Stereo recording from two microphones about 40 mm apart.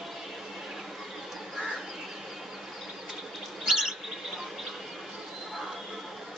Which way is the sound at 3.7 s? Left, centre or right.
Centre.